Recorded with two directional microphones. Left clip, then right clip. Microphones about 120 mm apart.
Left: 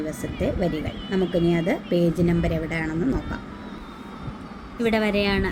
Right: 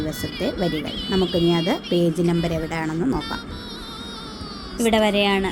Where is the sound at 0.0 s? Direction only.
30° right (ahead or behind).